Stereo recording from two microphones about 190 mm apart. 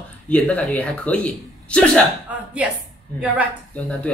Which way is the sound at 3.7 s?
10° left (ahead or behind).